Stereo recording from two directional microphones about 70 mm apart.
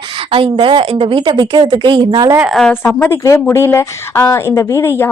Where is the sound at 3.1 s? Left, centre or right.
Left.